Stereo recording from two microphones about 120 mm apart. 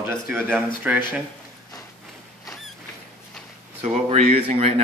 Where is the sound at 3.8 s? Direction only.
60° right (ahead or behind).